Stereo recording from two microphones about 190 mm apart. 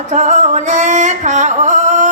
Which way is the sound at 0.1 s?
40° right (ahead or behind).